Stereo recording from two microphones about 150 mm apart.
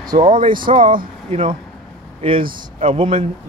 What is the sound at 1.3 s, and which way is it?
Speech, 45° right (ahead or behind).